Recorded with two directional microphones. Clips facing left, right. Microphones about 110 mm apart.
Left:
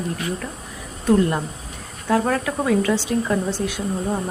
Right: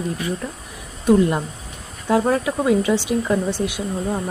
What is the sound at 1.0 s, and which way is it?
A woman's voice, 15° right (ahead or behind).